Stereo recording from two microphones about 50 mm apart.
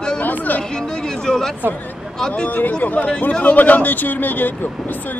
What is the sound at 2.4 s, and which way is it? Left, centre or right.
Speech, left.